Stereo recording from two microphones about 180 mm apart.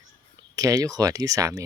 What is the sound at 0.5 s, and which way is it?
Speech, 20° right (ahead or behind).